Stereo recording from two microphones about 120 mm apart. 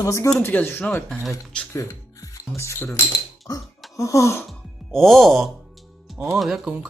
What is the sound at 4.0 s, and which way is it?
Speech, 25° left (ahead or behind).